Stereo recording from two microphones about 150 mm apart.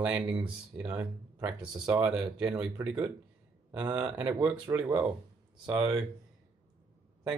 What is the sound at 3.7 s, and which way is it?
Speech, 10° right (ahead or behind).